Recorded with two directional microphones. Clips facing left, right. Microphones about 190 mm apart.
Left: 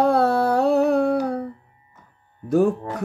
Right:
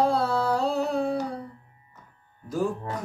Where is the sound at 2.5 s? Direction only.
65° left (ahead or behind).